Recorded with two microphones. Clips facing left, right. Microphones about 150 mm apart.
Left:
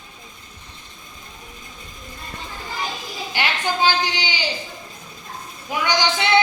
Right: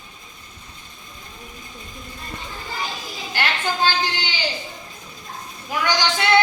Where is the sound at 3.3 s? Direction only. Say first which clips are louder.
Even; 15° left (ahead or behind).